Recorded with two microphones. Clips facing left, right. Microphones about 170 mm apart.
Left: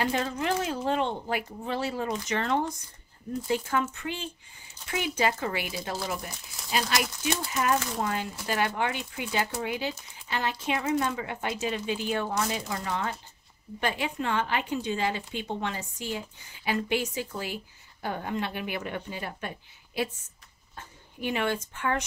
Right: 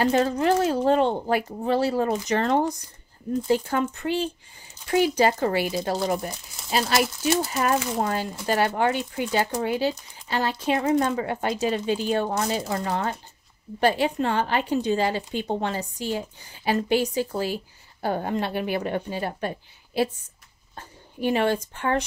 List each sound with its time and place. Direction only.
0.0 s speech: 40° right (ahead or behind)
20.7 s a sound: 35° right (ahead or behind)
21.7 s speech: 35° right (ahead or behind)